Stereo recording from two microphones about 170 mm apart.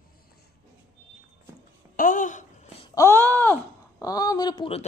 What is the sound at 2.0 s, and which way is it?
Speech, 50° left (ahead or behind).